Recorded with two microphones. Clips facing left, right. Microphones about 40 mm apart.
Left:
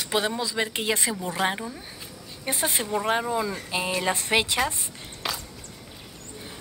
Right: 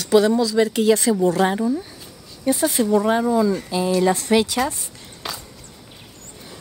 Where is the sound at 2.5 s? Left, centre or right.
Left.